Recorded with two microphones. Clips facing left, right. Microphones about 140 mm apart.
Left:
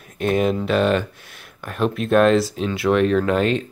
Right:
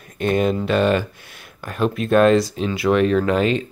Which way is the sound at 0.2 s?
Centre (ahead or behind).